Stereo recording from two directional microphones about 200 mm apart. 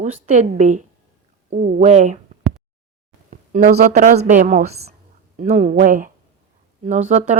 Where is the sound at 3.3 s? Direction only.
40° right (ahead or behind).